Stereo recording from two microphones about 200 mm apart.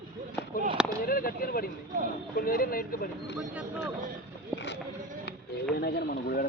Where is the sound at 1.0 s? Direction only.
45° left (ahead or behind).